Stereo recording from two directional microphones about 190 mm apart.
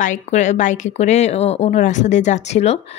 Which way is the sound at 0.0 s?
40° left (ahead or behind).